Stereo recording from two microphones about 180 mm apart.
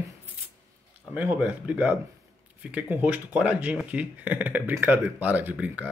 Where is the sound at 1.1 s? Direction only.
10° right (ahead or behind).